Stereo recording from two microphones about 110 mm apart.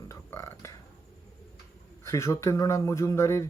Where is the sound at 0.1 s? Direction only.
25° left (ahead or behind).